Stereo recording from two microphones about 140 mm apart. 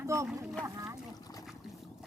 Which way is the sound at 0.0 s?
20° right (ahead or behind).